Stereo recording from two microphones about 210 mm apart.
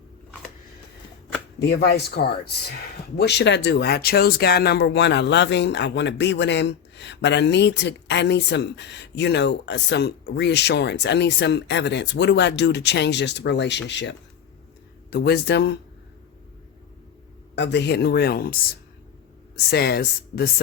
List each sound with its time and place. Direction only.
1.5 s speech: 50° left (ahead or behind)
17.5 s speech: 55° left (ahead or behind)
19.7 s speech: 50° left (ahead or behind)